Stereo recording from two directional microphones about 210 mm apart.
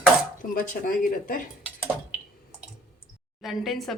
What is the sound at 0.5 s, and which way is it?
Speech, 40° left (ahead or behind).